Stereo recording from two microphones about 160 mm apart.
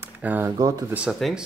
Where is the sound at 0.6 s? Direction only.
25° right (ahead or behind).